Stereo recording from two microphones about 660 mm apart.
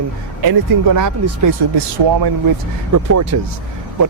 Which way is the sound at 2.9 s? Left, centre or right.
Right.